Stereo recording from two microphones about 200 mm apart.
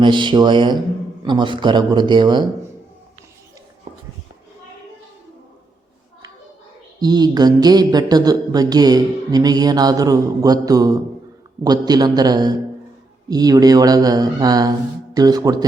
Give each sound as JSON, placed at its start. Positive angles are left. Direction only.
{"t": 0.0, "sound": "speech", "side_deg": -25}
{"t": 7.0, "sound": "speech", "side_deg": -20}